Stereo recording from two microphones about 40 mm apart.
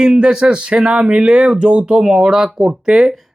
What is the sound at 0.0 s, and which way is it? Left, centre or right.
Speech, centre.